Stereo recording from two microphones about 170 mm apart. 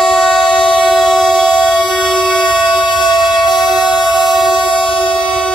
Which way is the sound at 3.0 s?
25° left (ahead or behind).